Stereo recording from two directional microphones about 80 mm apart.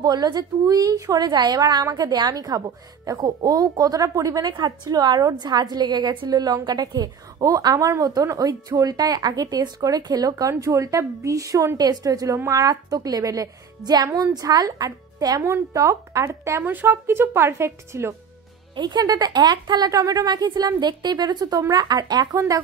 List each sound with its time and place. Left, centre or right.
0.0 s a woman's voice: right
1.2 s a woman's voice: right
4.4 s a woman's voice: right
10.6 s a woman's voice: right
16.6 s speech: right
18.8 s a woman's voice: right
19.9 s a woman's voice: right